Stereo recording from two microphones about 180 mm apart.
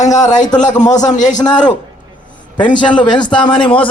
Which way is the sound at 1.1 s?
45° left (ahead or behind).